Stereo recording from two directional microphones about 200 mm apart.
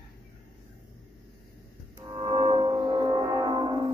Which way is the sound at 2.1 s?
20° right (ahead or behind).